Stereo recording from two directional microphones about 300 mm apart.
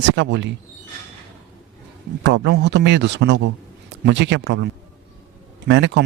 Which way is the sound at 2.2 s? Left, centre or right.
Right.